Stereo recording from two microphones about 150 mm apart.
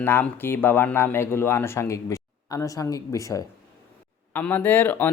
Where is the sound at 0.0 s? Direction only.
15° left (ahead or behind).